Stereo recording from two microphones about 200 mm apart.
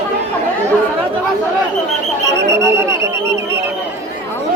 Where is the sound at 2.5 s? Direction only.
15° right (ahead or behind).